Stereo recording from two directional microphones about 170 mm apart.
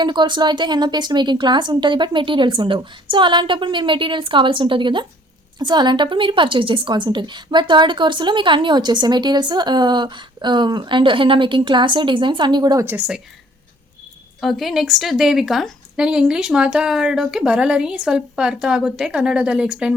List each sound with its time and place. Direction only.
0.0 s a woman's voice: 25° right (ahead or behind); by 13.2 s 5° right (ahead or behind)
14.4 s a woman's voice: centre (ahead or behind)